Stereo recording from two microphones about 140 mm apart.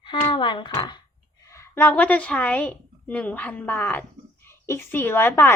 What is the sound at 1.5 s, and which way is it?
A woman's voice, 15° left (ahead or behind).